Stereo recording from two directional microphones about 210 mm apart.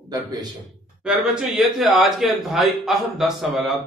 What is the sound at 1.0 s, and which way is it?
Speech, centre (ahead or behind).